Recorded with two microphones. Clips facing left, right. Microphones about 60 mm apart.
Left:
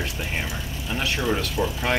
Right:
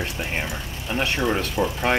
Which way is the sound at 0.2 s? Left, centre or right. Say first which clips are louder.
Right 2 dB; centre.